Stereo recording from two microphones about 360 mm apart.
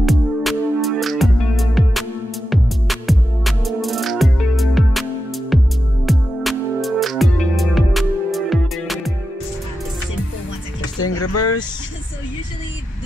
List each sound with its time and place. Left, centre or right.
0.0 s music: centre
11.0 s vehicle: left